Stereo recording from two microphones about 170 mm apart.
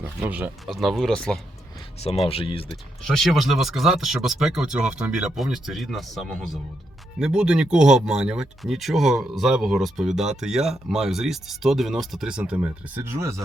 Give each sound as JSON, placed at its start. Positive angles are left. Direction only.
{"t": 0.0, "sound": "speech", "side_deg": -10}
{"t": 2.2, "sound": "speech", "side_deg": 35}
{"t": 2.6, "sound": "speech", "side_deg": 0}